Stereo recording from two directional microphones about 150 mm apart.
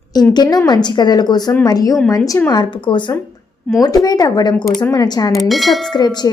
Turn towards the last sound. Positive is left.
turn(degrees=25)  # may be behind; listen again after turning